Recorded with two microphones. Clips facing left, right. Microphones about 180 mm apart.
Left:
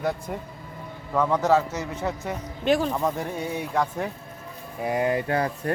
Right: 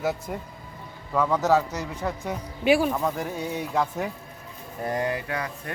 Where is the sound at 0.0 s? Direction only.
5° right (ahead or behind).